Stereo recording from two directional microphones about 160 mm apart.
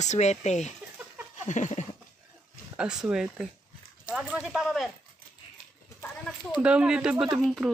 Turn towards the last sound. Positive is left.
turn(degrees=0)  # may be behind; listen again after turning